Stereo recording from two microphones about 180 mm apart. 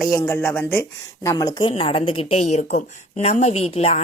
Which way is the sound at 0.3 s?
10° left (ahead or behind).